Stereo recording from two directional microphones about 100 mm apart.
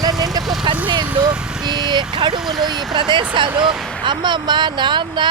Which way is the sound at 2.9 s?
50° right (ahead or behind).